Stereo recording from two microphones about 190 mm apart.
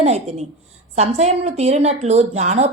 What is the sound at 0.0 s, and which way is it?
A woman's voice, 35° right (ahead or behind).